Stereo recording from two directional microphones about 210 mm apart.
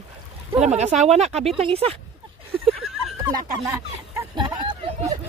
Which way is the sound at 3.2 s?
20° right (ahead or behind).